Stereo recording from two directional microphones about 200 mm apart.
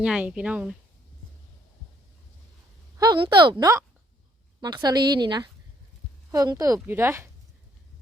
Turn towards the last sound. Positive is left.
turn(degrees=-10)  # may be behind; listen again after turning